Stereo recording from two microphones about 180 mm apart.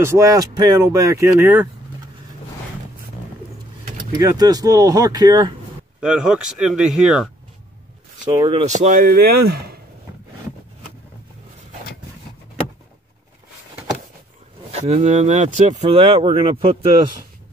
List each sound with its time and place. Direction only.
0.0 s speech: 15° right (ahead or behind)
4.1 s speech: 20° right (ahead or behind)
5.9 s speech: 5° right (ahead or behind)
8.5 s speech: 35° right (ahead or behind); by 9.8 s 60° right (ahead or behind)
14.7 s speech: 35° right (ahead or behind)